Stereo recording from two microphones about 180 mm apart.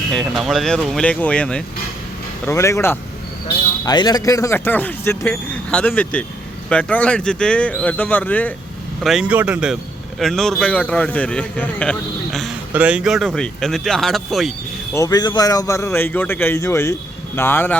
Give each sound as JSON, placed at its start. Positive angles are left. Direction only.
{"t": 0.1, "sound": "speech", "side_deg": 0}
{"t": 9.0, "sound": "speech", "side_deg": -5}
{"t": 14.9, "sound": "speech", "side_deg": 20}